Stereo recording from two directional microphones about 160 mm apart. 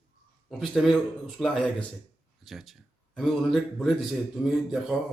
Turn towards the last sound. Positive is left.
turn(degrees=-5)  # may be behind; listen again after turning